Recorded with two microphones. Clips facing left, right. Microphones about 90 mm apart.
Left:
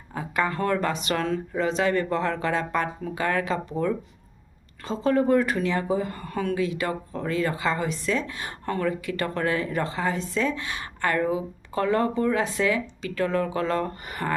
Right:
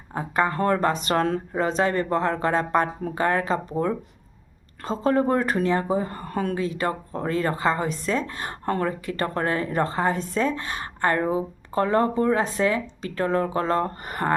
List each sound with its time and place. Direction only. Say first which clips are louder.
0.1 s speech: right 3 dB; 35° right (ahead or behind)